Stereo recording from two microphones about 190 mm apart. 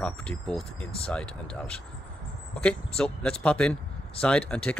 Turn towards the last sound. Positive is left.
turn(degrees=5)  # may be behind; listen again after turning